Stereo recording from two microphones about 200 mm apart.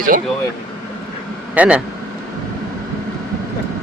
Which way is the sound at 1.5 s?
5° right (ahead or behind).